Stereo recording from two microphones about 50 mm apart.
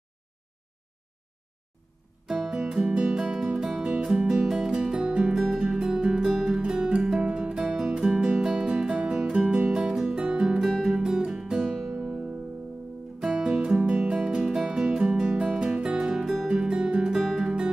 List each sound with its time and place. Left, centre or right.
2.4 s music: centre
2.7 s music: centre
5.3 s music: centre
13.2 s music: centre
16.5 s music: centre